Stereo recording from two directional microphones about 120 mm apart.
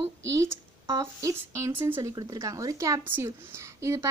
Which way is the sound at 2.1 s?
30° right (ahead or behind).